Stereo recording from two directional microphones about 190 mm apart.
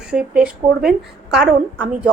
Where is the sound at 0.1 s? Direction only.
5° right (ahead or behind).